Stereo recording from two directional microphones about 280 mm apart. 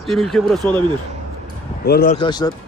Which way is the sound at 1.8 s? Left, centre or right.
Left.